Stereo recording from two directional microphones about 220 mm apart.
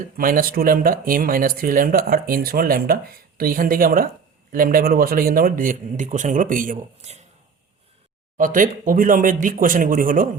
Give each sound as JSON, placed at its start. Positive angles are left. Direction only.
{"t": 0.2, "sound": "speech", "side_deg": -40}
{"t": 8.4, "sound": "speech", "side_deg": -40}